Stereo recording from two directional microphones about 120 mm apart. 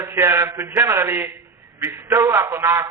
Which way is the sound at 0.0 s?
20° right (ahead or behind).